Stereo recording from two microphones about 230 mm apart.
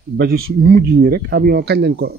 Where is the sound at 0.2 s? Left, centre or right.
Right.